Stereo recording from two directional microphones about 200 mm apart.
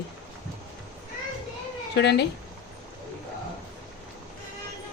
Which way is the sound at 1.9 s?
55° left (ahead or behind).